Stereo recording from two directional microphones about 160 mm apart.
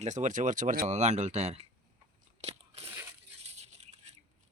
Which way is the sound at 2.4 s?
40° right (ahead or behind).